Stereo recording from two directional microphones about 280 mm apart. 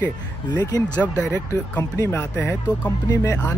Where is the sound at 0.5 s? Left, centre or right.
Centre.